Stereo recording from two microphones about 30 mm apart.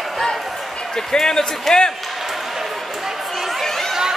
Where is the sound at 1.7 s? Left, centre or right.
Centre.